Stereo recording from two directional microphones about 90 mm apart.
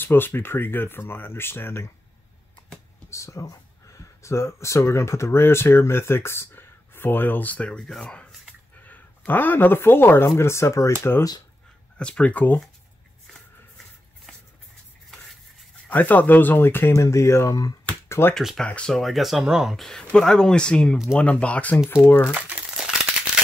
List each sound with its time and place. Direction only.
0.0 s speech: 25° left (ahead or behind)
3.1 s speech: 35° left (ahead or behind); by 8.3 s 10° left (ahead or behind)
8.8 s speech: 20° left (ahead or behind)
12.0 s speech: 10° left (ahead or behind)
15.9 s speech: 20° left (ahead or behind)
17.6 s speech: 45° left (ahead or behind)
18.3 s speech: 5° right (ahead or behind)
18.6 s speech: 10° left (ahead or behind)
18.9 s speech: centre (ahead or behind); by 21.8 s 15° left (ahead or behind)
21.8 s speech: 30° left (ahead or behind)